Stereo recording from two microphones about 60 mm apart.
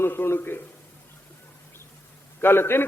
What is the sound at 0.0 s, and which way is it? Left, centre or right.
Speech, left.